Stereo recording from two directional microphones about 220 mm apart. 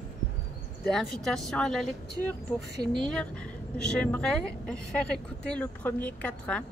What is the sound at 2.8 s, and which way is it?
Speech, 20° right (ahead or behind).